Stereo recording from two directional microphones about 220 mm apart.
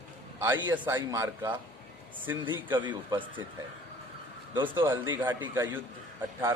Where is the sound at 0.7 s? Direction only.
10° right (ahead or behind).